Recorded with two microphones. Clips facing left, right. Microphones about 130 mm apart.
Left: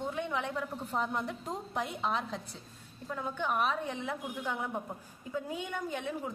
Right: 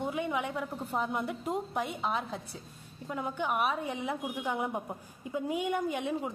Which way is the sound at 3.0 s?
15° right (ahead or behind).